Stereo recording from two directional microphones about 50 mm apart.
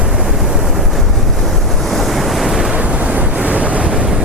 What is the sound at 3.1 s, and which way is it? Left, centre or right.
Waves, right.